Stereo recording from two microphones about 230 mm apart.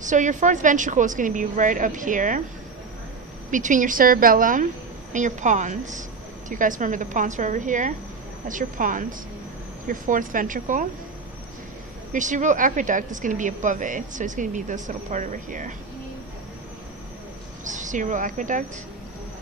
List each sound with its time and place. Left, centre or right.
0.0 s a woman's voice: right
3.4 s a woman's voice: right
12.1 s a woman's voice: right
17.6 s a woman's voice: right